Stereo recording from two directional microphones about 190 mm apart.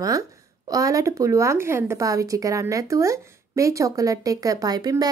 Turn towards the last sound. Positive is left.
turn(degrees=-20)  # may be behind; listen again after turning